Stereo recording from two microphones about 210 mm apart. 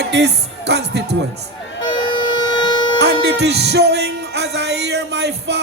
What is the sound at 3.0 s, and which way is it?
Music, 55° right (ahead or behind).